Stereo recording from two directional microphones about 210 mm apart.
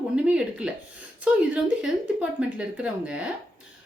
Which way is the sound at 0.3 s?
5° right (ahead or behind).